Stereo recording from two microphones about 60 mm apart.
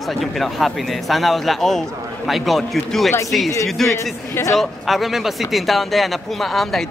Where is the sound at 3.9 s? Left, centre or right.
Left.